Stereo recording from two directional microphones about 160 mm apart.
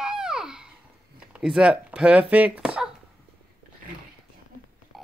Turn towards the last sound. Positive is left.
turn(degrees=0)  # may be behind; listen again after turning